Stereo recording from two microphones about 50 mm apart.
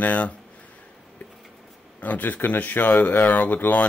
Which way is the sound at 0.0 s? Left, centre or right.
Left.